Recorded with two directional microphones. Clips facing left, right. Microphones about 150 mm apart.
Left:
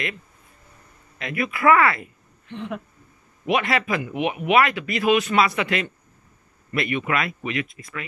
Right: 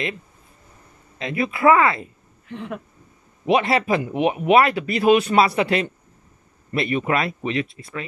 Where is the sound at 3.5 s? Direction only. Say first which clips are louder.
Right 4 dB; 30° right (ahead or behind).